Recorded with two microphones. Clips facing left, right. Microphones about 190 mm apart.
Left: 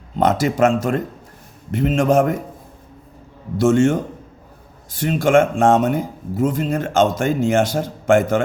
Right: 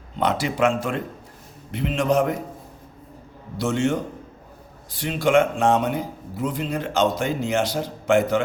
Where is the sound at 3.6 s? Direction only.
45° left (ahead or behind).